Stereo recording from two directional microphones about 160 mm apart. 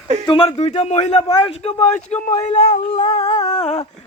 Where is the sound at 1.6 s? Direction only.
45° left (ahead or behind).